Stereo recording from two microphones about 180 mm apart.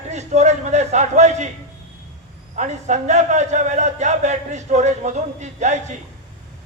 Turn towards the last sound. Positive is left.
turn(degrees=-40)  # may be behind; listen again after turning